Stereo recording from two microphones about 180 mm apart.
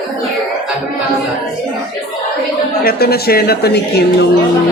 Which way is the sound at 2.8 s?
60° left (ahead or behind).